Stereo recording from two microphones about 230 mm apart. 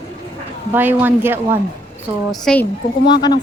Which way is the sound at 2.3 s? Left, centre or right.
Centre.